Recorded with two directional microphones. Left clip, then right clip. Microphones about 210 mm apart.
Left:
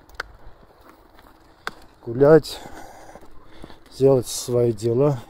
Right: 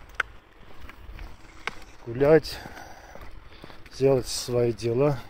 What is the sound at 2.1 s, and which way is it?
Speech, 20° left (ahead or behind).